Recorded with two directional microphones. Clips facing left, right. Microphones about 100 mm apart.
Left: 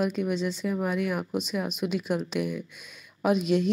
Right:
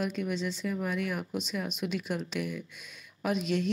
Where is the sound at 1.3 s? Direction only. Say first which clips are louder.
Left 5 dB; 50° left (ahead or behind).